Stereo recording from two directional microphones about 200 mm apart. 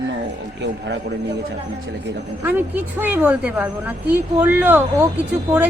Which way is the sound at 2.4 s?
10° right (ahead or behind).